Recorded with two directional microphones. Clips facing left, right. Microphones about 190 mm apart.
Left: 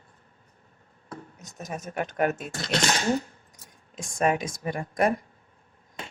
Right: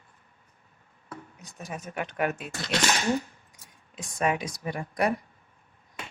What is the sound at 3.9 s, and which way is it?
Speech, 45° left (ahead or behind).